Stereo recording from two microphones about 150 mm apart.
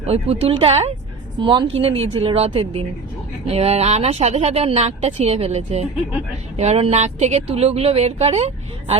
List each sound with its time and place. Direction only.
0.0 s a woman's voice: 40° right (ahead or behind)
1.4 s a woman's voice: 35° right (ahead or behind)